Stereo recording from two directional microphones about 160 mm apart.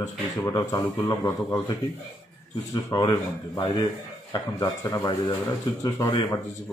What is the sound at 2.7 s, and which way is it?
A man's voice, 20° left (ahead or behind).